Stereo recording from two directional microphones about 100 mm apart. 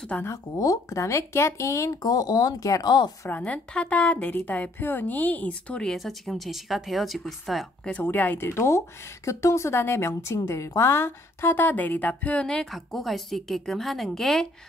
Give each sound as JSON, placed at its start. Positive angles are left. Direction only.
{"t": 0.2, "sound": "speech", "side_deg": 35}
{"t": 3.3, "sound": "a woman's voice", "side_deg": 15}
{"t": 7.9, "sound": "speech", "side_deg": 20}